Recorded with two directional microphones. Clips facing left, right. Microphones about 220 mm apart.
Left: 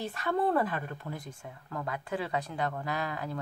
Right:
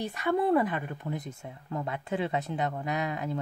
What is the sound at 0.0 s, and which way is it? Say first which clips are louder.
Speech: right 2 dB; 15° right (ahead or behind).